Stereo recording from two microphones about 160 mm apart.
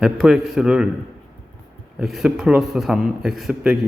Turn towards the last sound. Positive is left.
turn(degrees=-5)  # may be behind; listen again after turning